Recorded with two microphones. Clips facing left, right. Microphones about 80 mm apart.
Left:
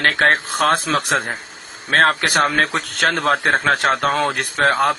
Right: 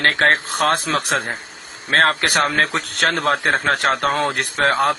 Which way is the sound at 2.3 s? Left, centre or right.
Left.